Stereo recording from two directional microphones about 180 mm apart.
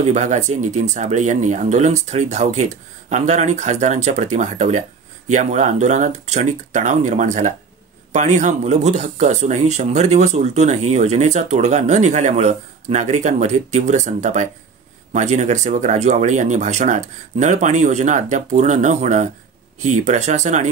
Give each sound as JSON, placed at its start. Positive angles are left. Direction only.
{"t": 0.0, "sound": "speech", "side_deg": -40}